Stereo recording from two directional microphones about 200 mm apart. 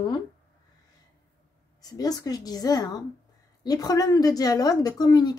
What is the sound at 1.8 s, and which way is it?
A woman's voice, 20° left (ahead or behind).